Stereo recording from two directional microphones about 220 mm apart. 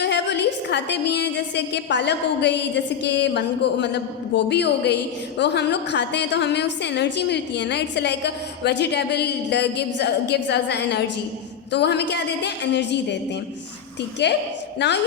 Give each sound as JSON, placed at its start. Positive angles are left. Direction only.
{"t": 0.0, "sound": "a woman's voice", "side_deg": 50}